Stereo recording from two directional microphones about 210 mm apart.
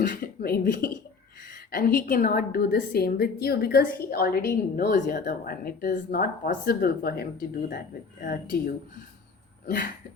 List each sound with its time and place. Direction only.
0.1 s a woman's voice: 45° left (ahead or behind)